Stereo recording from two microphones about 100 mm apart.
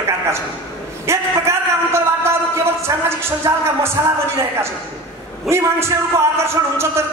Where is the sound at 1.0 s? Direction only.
25° right (ahead or behind).